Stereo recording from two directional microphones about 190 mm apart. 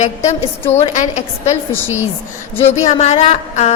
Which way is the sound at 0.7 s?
35° left (ahead or behind).